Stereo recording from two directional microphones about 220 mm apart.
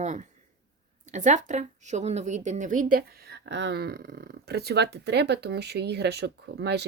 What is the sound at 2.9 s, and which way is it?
Speech, 45° right (ahead or behind).